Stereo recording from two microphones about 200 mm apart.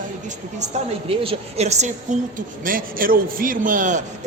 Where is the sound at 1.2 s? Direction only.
30° right (ahead or behind).